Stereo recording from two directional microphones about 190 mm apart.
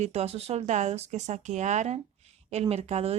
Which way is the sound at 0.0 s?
35° right (ahead or behind).